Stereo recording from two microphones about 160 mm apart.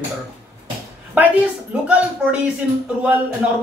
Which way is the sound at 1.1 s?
10° right (ahead or behind).